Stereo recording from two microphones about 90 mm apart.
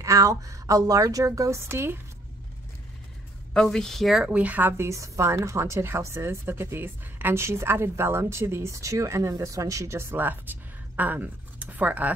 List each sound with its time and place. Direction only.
0.0 s a woman's voice: 35° right (ahead or behind)
3.5 s speech: 5° left (ahead or behind)
4.3 s a woman's voice: 15° right (ahead or behind)